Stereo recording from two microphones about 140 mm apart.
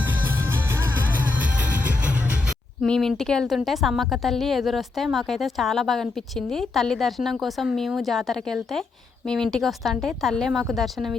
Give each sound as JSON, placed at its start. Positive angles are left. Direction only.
{"t": 1.2, "sound": "music", "side_deg": -10}
{"t": 2.8, "sound": "a woman's voice", "side_deg": 5}